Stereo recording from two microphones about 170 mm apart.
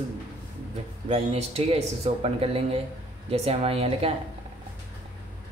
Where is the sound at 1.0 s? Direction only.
35° right (ahead or behind).